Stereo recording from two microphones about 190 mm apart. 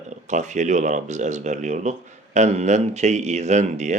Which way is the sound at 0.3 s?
40° right (ahead or behind).